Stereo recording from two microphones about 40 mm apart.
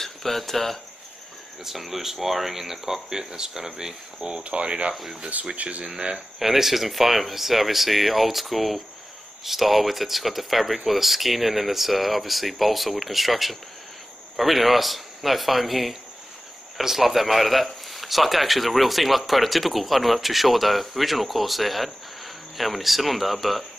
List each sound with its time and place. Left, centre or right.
0.0 s speech: centre
1.6 s speech: centre; by 4.9 s right
4.9 s speech: centre
5.6 s speech: right
5.9 s speech: right
6.4 s a man's voice: centre